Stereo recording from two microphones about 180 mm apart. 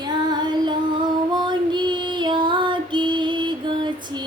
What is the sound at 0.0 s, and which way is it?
Female singing, 25° right (ahead or behind).